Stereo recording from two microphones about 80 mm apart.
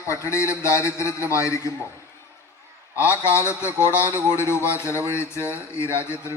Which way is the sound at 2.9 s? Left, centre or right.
Left.